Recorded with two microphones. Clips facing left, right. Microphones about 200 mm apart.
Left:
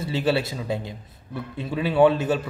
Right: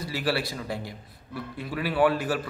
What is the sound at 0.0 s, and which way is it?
A man's voice, 25° left (ahead or behind).